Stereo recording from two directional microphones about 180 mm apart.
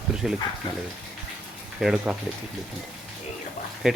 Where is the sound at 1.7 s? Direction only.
5° right (ahead or behind).